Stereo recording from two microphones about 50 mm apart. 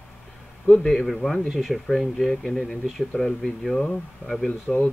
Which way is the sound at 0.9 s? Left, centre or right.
Centre.